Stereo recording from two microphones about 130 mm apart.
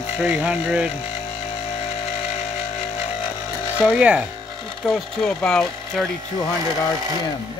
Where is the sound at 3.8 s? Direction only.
10° right (ahead or behind).